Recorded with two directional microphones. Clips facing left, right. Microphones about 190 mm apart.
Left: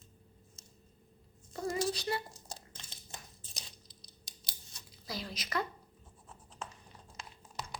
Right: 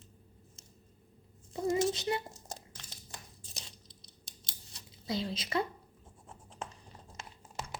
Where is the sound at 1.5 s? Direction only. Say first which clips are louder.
Right 4 dB; 20° right (ahead or behind).